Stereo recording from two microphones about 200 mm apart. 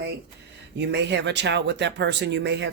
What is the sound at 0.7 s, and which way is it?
Speech, 60° right (ahead or behind).